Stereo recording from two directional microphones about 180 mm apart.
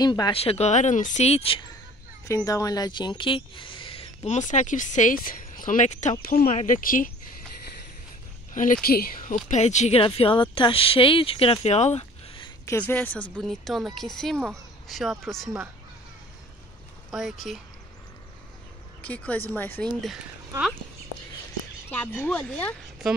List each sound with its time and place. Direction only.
0.0 s speech: 25° left (ahead or behind)
2.2 s speech: 20° left (ahead or behind); by 6.1 s 40° left (ahead or behind)
6.2 s speech: 55° left (ahead or behind)
8.8 s speech: 55° left (ahead or behind); by 12.4 s 35° left (ahead or behind)
12.6 s speech: 10° left (ahead or behind)
17.1 s speech: centre (ahead or behind)
18.9 s a woman's voice: 5° left (ahead or behind)
20.0 s speech: centre (ahead or behind)
21.9 s speech: 10° left (ahead or behind)